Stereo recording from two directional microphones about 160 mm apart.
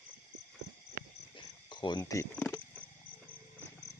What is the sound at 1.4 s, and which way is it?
Cricket, 30° left (ahead or behind).